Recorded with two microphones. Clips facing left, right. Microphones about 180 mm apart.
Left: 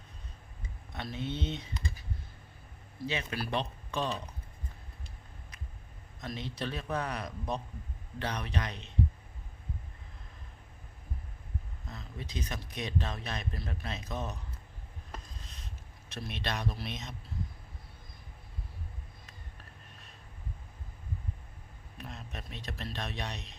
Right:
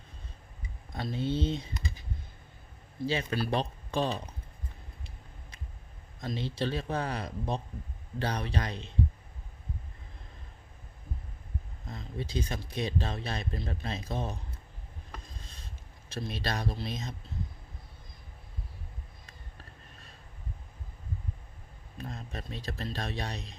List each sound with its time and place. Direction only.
0.9 s speech: 30° right (ahead or behind)
3.1 s speech: 35° right (ahead or behind)
6.1 s a man's voice: 30° right (ahead or behind)
11.9 s speech: 30° right (ahead or behind)
16.0 s speech: 30° right (ahead or behind)
21.9 s speech: 35° right (ahead or behind)